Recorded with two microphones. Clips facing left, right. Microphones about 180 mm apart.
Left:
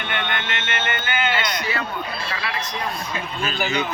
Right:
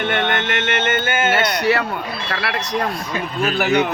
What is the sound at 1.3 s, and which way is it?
A man's voice, 70° right (ahead or behind).